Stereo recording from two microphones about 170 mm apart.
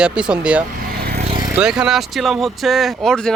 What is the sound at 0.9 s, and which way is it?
Vehicle, 65° right (ahead or behind).